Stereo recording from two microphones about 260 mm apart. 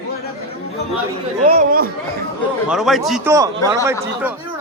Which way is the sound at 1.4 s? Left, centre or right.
Right.